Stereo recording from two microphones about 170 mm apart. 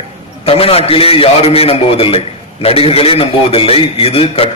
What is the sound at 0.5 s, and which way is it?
A man's voice, 35° left (ahead or behind).